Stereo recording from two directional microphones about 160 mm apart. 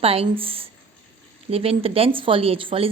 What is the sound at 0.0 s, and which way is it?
A woman's voice, 35° right (ahead or behind).